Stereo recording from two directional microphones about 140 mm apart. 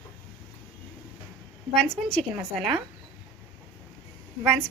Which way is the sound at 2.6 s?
Centre (ahead or behind).